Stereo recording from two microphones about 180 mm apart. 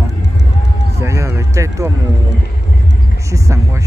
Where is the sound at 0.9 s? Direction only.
15° right (ahead or behind).